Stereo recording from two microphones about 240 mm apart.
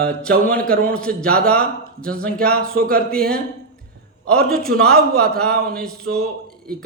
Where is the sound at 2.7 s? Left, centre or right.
Right.